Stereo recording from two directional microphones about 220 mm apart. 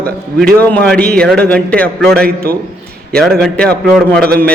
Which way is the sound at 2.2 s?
45° right (ahead or behind).